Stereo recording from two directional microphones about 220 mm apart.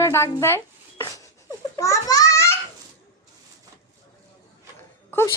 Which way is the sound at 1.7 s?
15° left (ahead or behind).